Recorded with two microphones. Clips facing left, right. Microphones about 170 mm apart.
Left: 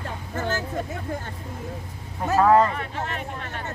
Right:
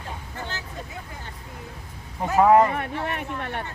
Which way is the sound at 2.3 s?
15° right (ahead or behind).